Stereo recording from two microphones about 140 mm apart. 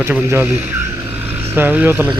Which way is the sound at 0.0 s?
15° right (ahead or behind).